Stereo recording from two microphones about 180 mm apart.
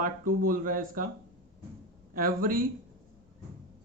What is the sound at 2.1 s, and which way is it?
Speech, 50° right (ahead or behind).